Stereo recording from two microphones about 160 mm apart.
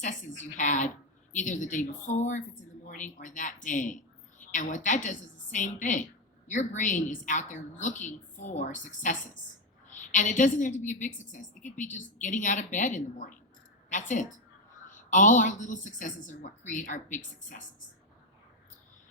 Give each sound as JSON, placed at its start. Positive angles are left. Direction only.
{"t": 0.5, "sound": "a woman's voice", "side_deg": 50}